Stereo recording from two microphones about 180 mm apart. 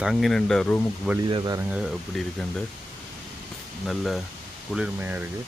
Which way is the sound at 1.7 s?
5° right (ahead or behind).